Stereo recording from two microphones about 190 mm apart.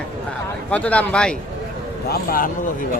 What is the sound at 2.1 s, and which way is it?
Speech, 50° left (ahead or behind).